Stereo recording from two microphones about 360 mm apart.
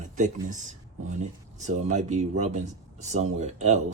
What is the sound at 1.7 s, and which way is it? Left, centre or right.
Speech, centre.